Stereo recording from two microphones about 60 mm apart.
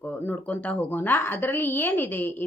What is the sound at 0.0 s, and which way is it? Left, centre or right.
Speech, left.